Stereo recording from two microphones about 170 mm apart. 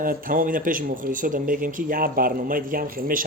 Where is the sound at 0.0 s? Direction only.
55° right (ahead or behind).